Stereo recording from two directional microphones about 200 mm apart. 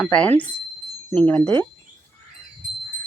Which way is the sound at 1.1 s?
5° left (ahead or behind).